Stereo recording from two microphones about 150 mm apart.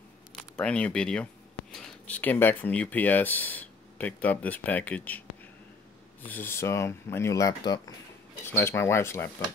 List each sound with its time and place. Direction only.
0.4 s speech: 10° left (ahead or behind)
6.2 s speech: 15° left (ahead or behind)
8.5 s speech: 15° left (ahead or behind)